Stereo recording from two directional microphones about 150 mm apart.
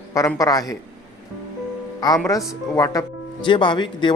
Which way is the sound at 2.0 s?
25° left (ahead or behind).